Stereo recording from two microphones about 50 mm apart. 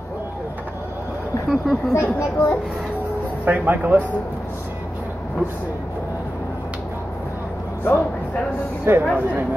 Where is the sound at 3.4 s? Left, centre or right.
Right.